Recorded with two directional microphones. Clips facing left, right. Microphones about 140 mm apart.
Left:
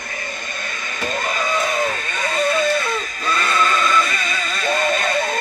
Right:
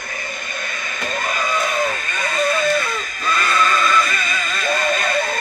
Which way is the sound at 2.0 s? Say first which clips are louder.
Even; 25° left (ahead or behind).